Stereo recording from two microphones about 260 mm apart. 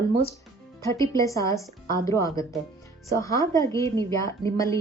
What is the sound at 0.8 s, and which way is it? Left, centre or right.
A woman's voice, centre.